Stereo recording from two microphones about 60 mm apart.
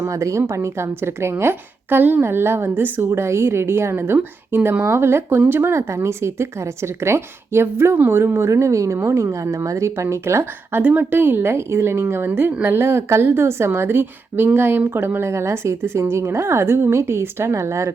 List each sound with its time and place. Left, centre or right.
0.1 s speech: right
3.1 s a woman's voice: right
5.9 s speech: right
10.8 s a woman's voice: right
15.3 s speech: right